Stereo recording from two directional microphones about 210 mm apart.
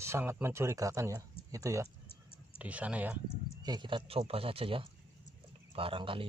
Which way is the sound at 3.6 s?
20° right (ahead or behind).